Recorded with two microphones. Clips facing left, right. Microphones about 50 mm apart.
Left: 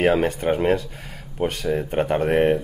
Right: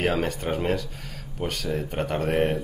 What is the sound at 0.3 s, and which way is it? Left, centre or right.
Speech, left.